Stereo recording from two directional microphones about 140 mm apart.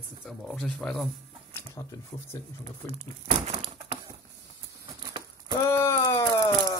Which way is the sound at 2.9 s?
45° right (ahead or behind).